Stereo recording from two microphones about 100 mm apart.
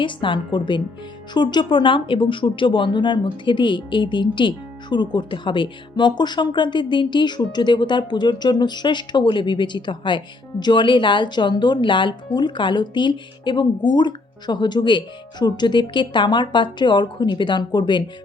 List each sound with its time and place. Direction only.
0.0 s speech: 55° left (ahead or behind)